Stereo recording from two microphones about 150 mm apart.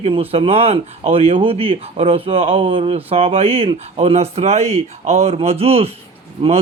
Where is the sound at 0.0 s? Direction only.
40° right (ahead or behind).